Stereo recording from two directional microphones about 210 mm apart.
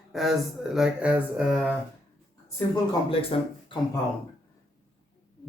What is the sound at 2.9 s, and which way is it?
Speech, 25° left (ahead or behind).